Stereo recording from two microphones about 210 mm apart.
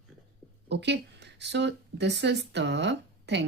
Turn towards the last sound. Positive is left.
turn(degrees=-55)  # may be behind; listen again after turning